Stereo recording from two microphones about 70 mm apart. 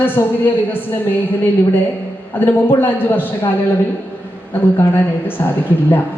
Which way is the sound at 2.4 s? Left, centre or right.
Left.